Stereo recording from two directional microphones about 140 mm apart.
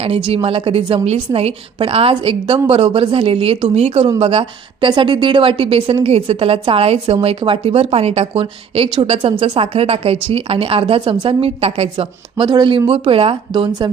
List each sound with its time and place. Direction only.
0.0 s a woman's voice: 45° right (ahead or behind)